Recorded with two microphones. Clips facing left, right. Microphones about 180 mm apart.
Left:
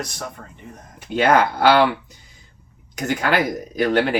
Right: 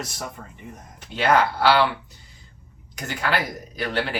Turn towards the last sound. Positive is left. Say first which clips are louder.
# left 8 dB
turn(degrees=50)  # may be behind; listen again after turning